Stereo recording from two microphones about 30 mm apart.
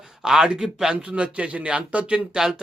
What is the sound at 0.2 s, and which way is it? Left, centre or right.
Speech, right.